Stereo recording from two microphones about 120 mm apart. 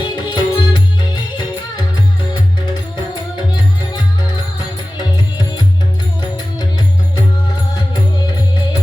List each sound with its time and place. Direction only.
0.0 s music: 40° left (ahead or behind)